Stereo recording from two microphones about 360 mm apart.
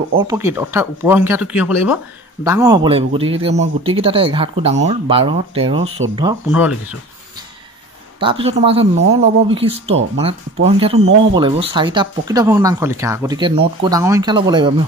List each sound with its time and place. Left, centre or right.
0.2 s speech: centre
8.2 s speech: centre